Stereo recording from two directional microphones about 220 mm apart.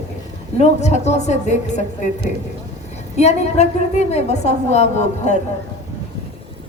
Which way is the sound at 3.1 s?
30° left (ahead or behind).